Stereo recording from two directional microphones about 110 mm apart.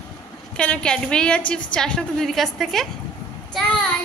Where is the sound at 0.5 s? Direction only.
10° left (ahead or behind).